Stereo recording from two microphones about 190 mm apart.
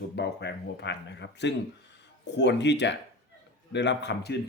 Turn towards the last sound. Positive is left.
turn(degrees=60)  # may be behind; listen again after turning